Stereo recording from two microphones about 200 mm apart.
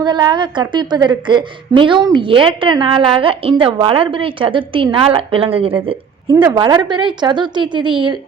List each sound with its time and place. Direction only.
0.0 s a woman's voice: 20° right (ahead or behind)